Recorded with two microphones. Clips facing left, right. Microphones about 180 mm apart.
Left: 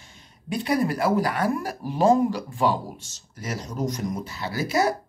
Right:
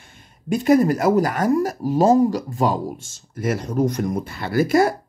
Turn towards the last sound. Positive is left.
turn(degrees=-50)  # may be behind; listen again after turning